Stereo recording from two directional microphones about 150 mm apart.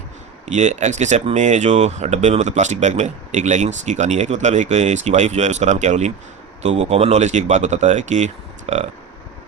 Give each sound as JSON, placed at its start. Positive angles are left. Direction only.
{"t": 0.4, "sound": "speech", "side_deg": -50}